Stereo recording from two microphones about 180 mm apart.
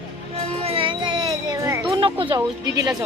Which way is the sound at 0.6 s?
30° right (ahead or behind).